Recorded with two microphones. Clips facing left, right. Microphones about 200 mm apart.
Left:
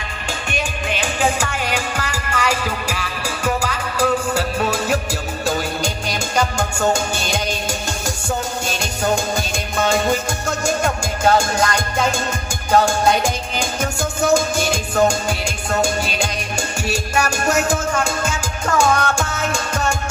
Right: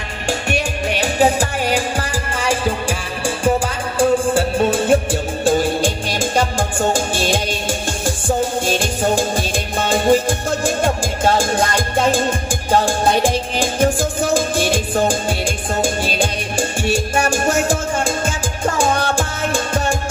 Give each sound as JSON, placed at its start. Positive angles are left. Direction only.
{"t": 1.0, "sound": "music", "side_deg": -35}